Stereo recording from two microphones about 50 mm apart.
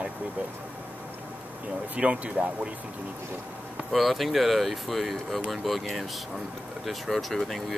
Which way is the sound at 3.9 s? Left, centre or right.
Centre.